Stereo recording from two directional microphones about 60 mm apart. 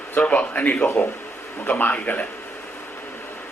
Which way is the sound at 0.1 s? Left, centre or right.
Left.